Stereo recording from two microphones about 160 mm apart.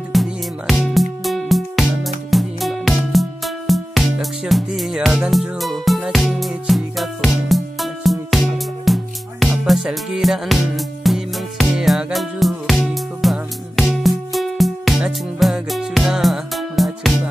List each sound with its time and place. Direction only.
0.1 s music: centre (ahead or behind)